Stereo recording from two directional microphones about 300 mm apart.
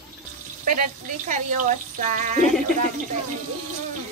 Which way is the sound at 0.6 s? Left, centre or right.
Right.